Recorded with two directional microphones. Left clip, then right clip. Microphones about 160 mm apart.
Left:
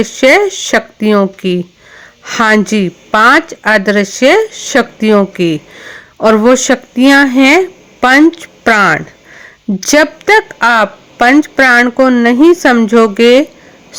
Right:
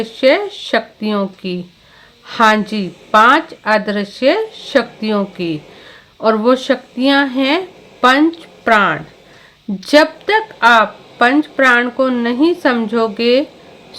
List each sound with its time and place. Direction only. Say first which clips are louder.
0.0 s a woman's voice: left 6 dB; 45° left (ahead or behind)